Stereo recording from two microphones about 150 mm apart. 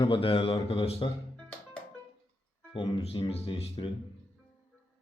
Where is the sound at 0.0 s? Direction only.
35° left (ahead or behind).